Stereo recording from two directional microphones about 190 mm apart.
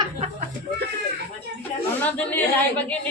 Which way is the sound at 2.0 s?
10° left (ahead or behind).